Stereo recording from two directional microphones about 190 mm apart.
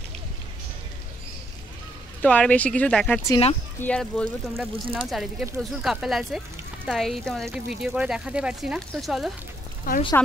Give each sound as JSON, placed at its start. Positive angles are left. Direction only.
{"t": 2.2, "sound": "speech", "side_deg": 5}
{"t": 3.3, "sound": "speech", "side_deg": 25}
{"t": 3.8, "sound": "speech", "side_deg": 5}
{"t": 9.9, "sound": "speech", "side_deg": 50}